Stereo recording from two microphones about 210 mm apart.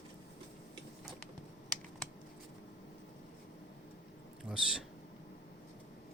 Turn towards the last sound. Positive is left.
turn(degrees=-5)  # may be behind; listen again after turning